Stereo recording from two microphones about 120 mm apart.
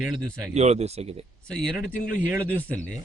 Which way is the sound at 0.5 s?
65° right (ahead or behind).